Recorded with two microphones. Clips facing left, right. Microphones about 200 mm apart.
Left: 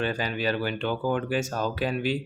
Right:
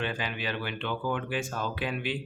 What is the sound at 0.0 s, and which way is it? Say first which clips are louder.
Speech: left 6 dB; 40° left (ahead or behind).